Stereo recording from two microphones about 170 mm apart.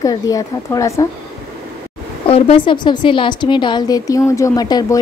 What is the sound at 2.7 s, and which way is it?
A woman's voice, 30° left (ahead or behind).